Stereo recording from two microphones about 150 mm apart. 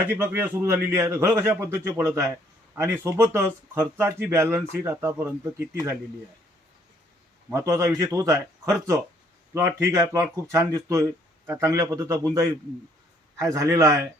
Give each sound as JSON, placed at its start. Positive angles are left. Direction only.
{"t": 0.1, "sound": "a man's voice", "side_deg": -15}
{"t": 7.5, "sound": "a man's voice", "side_deg": -20}
{"t": 13.3, "sound": "a man's voice", "side_deg": -20}